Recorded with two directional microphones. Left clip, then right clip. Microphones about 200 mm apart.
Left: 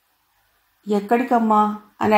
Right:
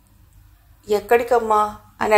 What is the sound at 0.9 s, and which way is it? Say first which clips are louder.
Speech: right 2 dB; 25° right (ahead or behind).